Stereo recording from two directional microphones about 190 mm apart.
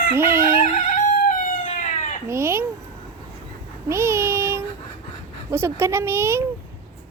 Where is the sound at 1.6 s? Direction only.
40° left (ahead or behind).